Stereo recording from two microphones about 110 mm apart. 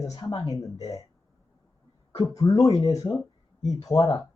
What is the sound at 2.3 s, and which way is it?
Speech, 30° left (ahead or behind).